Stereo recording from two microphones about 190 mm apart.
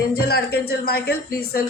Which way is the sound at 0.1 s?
55° left (ahead or behind).